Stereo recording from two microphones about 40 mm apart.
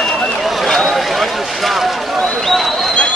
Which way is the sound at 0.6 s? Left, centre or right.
Centre.